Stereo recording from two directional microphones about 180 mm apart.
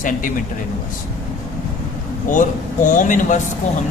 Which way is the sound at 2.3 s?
45° left (ahead or behind).